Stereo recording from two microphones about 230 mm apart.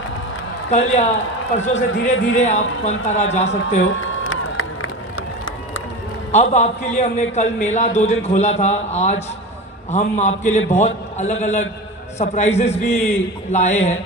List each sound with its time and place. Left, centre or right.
0.7 s a man's voice: left
3.8 s a sound: left
6.3 s a man's voice: left